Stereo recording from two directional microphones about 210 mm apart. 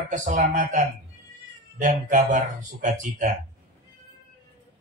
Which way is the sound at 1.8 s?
35° right (ahead or behind).